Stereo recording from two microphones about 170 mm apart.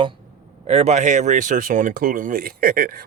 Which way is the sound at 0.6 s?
40° right (ahead or behind).